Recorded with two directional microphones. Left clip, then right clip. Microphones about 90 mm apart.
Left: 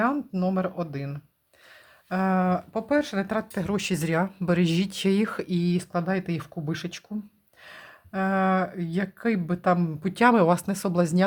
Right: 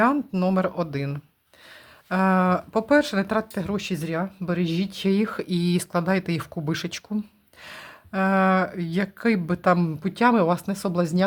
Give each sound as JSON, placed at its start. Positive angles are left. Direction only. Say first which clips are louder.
{"t": 0.3, "sound": "speech", "louder": "right 4 dB", "side_deg": -35}
{"t": 2.7, "sound": "speech", "louder": "right 7 dB", "side_deg": -35}
{"t": 3.8, "sound": "speech", "louder": "left 3 dB", "side_deg": 30}
{"t": 5.5, "sound": "speech", "louder": "right 2 dB", "side_deg": -15}
{"t": 10.0, "sound": "speech", "louder": "even", "side_deg": 5}